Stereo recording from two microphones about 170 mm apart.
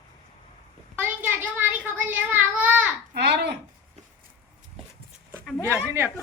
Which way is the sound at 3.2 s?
75° right (ahead or behind).